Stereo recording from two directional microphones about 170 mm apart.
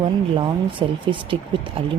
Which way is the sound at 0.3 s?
30° right (ahead or behind).